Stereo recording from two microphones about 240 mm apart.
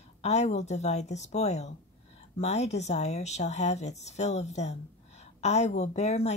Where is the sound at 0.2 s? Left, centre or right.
Left.